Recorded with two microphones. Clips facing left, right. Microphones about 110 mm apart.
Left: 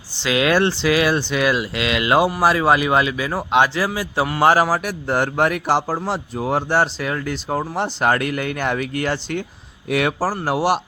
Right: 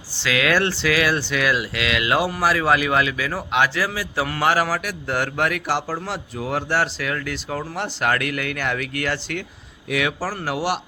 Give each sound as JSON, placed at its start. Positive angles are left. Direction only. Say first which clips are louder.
{"t": 0.2, "sound": "a man's voice", "louder": "left 3 dB", "side_deg": 25}
{"t": 9.9, "sound": "speech", "louder": "left 4 dB", "side_deg": 45}